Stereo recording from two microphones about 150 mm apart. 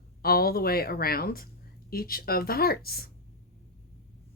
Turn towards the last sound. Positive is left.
turn(degrees=90)